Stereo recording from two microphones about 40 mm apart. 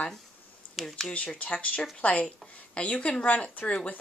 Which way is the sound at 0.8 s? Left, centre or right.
Centre.